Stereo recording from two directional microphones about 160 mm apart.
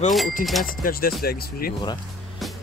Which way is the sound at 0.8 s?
65° left (ahead or behind).